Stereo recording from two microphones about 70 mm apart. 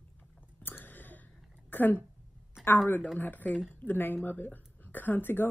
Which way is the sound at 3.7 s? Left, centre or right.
Left.